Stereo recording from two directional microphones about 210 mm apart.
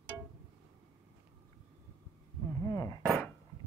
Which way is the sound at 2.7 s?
15° left (ahead or behind).